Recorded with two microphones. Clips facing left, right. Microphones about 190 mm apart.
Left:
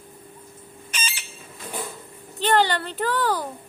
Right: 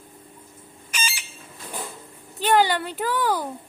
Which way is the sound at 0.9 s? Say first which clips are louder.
Right 3 dB; 10° right (ahead or behind).